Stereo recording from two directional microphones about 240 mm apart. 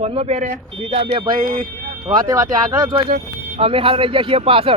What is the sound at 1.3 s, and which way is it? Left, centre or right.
Speech, right.